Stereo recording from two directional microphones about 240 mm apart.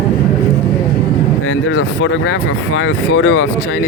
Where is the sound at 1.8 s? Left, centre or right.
Left.